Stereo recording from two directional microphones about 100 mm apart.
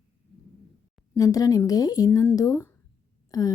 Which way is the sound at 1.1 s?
35° left (ahead or behind).